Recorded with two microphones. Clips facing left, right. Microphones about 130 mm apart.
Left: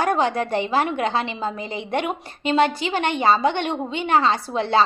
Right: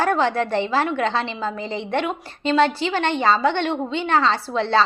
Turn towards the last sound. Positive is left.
turn(degrees=15)  # may be behind; listen again after turning